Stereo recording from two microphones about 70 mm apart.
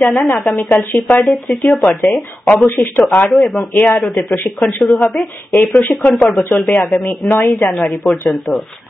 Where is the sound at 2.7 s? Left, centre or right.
Left.